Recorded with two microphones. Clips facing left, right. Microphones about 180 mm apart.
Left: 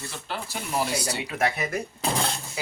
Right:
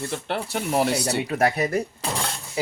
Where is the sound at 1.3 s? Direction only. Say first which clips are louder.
Right 4 dB; 40° right (ahead or behind).